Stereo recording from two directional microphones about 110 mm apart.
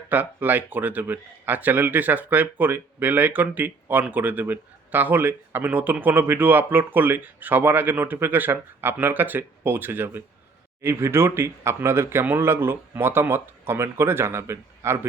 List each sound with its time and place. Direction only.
0.1 s speech: 15° right (ahead or behind)